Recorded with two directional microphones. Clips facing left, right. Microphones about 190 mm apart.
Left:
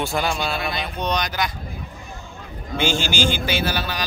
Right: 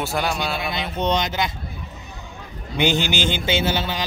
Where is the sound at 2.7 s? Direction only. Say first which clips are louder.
Right 1 dB; 20° right (ahead or behind).